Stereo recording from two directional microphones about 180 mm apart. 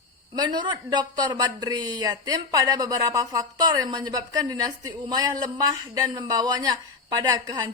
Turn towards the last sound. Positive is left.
turn(degrees=-20)  # may be behind; listen again after turning